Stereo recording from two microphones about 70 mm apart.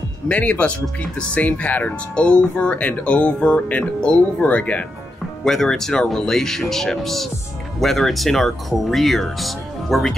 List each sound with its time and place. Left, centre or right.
0.3 s speech: centre
5.4 s speech: centre